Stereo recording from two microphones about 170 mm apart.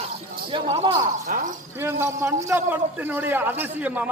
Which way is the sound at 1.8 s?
15° right (ahead or behind).